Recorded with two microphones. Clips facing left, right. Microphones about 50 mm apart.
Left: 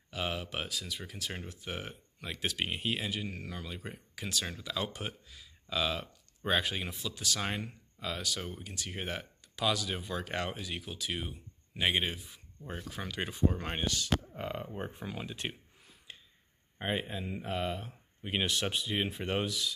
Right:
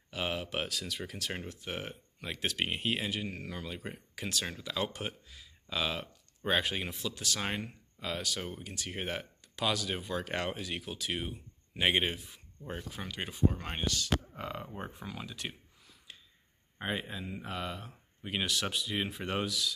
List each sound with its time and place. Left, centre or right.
0.1 s speech: right
0.7 s speech: right
1.6 s speech: right
2.3 s speech: right
4.1 s speech: right
4.6 s speech: right
6.9 s speech: right
7.3 s speech: right
8.4 s speech: centre
8.6 s speech: right
11.1 s speech: right
13.5 s speech: centre
16.1 s a sound: left
16.8 s speech: centre